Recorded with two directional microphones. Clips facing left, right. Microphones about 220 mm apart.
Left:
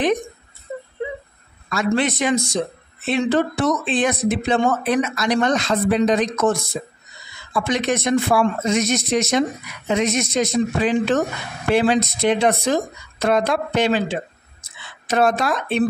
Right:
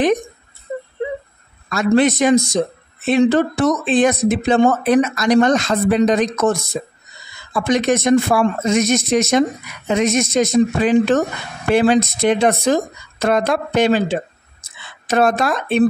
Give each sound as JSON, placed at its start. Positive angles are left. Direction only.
{"t": 1.7, "sound": "speech", "side_deg": -45}
{"t": 7.5, "sound": "speech", "side_deg": -45}